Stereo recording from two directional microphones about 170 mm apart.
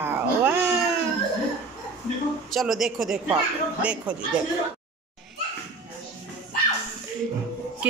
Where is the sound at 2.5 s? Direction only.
Centre (ahead or behind).